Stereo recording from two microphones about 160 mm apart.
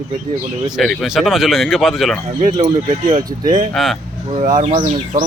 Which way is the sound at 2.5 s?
30° right (ahead or behind).